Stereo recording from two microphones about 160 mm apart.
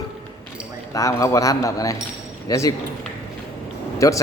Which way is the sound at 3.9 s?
20° left (ahead or behind).